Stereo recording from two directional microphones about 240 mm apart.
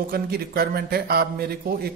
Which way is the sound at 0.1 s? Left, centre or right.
Right.